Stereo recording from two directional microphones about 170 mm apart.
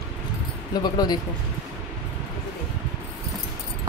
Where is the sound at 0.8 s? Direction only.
25° left (ahead or behind).